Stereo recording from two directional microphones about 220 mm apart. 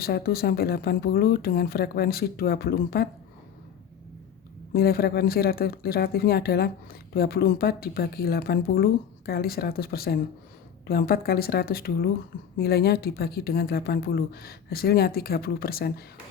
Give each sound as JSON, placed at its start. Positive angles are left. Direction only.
{"t": 0.0, "sound": "a woman's voice", "side_deg": 45}
{"t": 4.7, "sound": "a woman's voice", "side_deg": 45}